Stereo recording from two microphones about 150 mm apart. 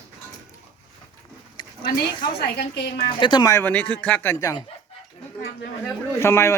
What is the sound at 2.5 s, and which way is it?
Speech, 90° left.